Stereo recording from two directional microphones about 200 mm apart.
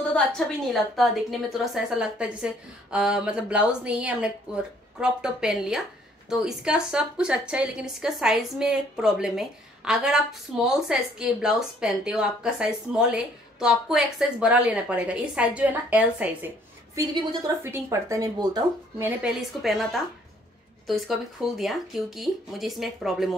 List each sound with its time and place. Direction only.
0.1 s a woman's voice: 5° left (ahead or behind)
16.9 s a woman's voice: 20° right (ahead or behind); by 23.3 s centre (ahead or behind)